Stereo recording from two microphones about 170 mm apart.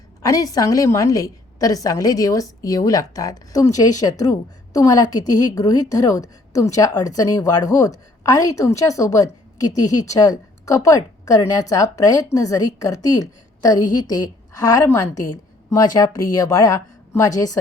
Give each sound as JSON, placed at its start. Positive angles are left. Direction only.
{"t": 0.2, "sound": "a woman's voice", "side_deg": 20}